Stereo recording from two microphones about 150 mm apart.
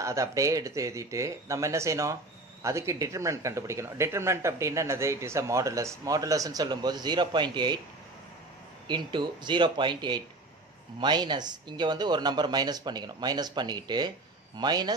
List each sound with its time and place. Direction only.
0.0 s speech: 20° right (ahead or behind)
8.8 s speech: 30° right (ahead or behind)